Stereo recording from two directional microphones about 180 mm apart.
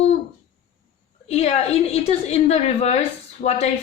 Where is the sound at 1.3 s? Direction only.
35° left (ahead or behind).